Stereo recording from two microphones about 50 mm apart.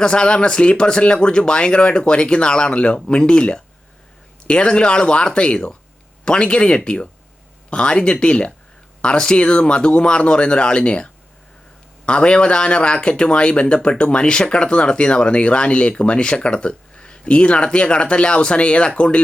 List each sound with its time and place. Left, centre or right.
0.0 s speech: centre